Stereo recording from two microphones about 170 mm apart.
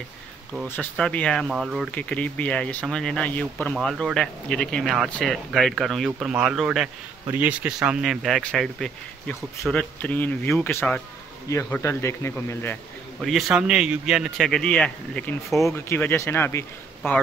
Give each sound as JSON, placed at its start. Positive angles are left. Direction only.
{"t": 0.7, "sound": "speech", "side_deg": 5}
{"t": 1.9, "sound": "speech", "side_deg": 10}
{"t": 13.2, "sound": "speech", "side_deg": 0}
{"t": 15.6, "sound": "speech", "side_deg": 15}